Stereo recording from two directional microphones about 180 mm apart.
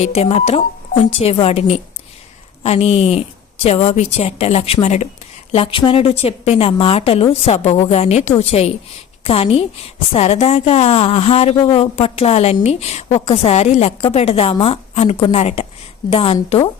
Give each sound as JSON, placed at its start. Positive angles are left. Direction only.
{"t": 0.0, "sound": "a woman's voice", "side_deg": 35}